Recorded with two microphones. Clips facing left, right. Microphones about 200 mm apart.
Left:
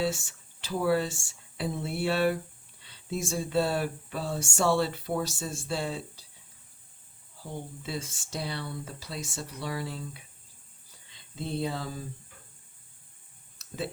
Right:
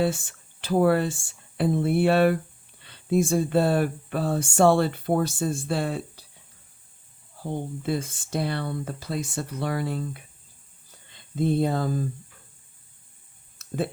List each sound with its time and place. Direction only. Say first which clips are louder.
0.0 s speech: right 5 dB; 55° right (ahead or behind)
7.4 s speech: right 9 dB; 55° right (ahead or behind)
13.6 s a sound: right 7 dB; 55° right (ahead or behind)